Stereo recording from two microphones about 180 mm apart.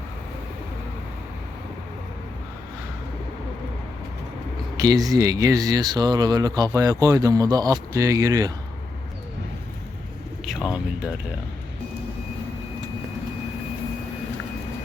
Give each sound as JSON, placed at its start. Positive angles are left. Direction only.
{"t": 4.8, "sound": "speech", "side_deg": -20}
{"t": 10.4, "sound": "speech", "side_deg": 0}